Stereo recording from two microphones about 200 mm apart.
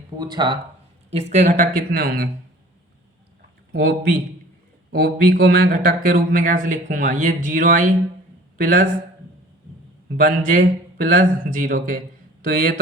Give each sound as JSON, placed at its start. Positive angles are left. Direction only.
{"t": 0.2, "sound": "speech", "side_deg": -20}
{"t": 1.3, "sound": "speech", "side_deg": -35}
{"t": 3.7, "sound": "a man's voice", "side_deg": -50}
{"t": 10.2, "sound": "speech", "side_deg": -45}